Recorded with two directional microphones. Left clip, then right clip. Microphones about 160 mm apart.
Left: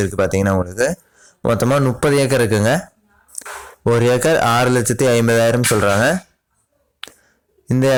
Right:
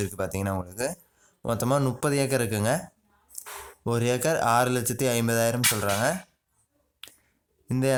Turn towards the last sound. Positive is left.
turn(degrees=35)  # may be behind; listen again after turning